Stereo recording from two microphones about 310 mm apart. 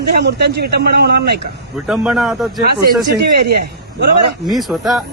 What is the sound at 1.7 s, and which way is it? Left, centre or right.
Speech, centre.